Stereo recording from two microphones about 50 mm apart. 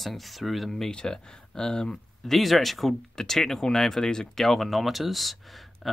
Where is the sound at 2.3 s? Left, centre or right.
Centre.